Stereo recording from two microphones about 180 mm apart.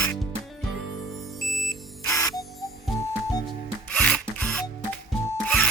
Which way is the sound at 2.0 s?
20° left (ahead or behind).